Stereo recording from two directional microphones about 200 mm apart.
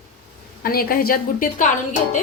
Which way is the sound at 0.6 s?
50° left (ahead or behind).